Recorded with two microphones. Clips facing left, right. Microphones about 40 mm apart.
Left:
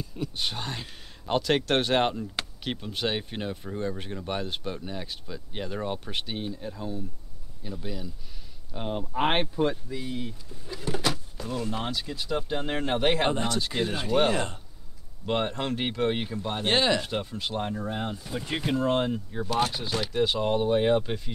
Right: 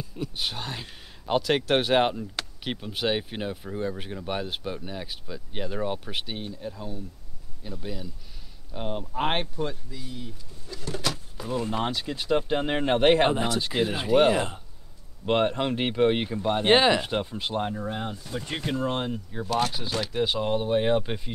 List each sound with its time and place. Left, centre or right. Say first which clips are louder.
0.0 s speech: even; centre
9.6 s speech: left 5 dB; left
10.7 s a sound: left 2 dB; centre
11.3 s speech: right 3 dB; centre
21.0 s speech: even; centre